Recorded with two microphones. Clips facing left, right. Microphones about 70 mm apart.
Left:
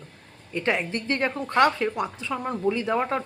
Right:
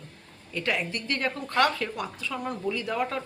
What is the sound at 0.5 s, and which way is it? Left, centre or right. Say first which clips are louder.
A woman's voice: left 4 dB; left.